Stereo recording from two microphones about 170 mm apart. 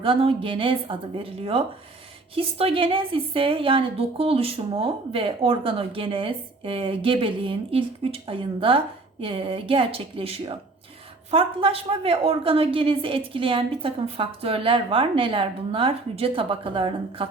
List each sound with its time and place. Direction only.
0.0 s a woman's voice: 35° right (ahead or behind)